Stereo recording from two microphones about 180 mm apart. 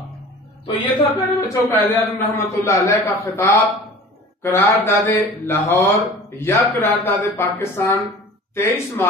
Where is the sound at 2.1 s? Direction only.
15° left (ahead or behind).